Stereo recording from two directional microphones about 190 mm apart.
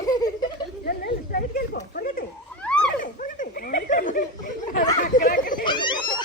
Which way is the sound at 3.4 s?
50° left (ahead or behind).